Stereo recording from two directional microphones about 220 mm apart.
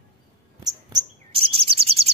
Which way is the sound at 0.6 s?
20° right (ahead or behind).